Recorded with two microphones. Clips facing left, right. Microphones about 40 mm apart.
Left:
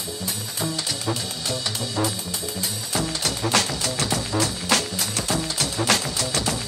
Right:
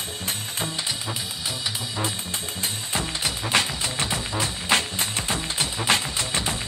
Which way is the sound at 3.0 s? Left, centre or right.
Right.